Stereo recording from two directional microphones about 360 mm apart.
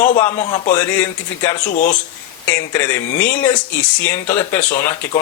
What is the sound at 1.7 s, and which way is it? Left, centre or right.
Speech, left.